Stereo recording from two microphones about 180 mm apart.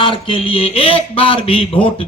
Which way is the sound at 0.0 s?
30° left (ahead or behind).